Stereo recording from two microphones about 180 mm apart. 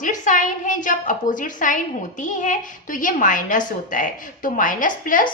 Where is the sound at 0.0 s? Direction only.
45° left (ahead or behind).